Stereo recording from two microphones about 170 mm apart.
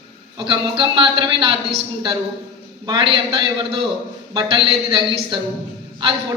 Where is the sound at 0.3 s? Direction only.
25° right (ahead or behind).